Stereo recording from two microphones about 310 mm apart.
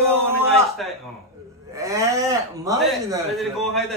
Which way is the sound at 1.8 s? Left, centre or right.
Centre.